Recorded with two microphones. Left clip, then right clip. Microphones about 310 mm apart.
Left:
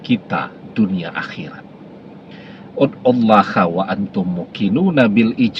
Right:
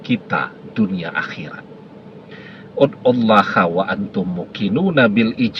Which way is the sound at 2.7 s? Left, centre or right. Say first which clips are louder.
Even; right.